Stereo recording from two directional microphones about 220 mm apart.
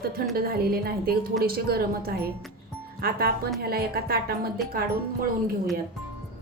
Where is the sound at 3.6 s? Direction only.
45° right (ahead or behind).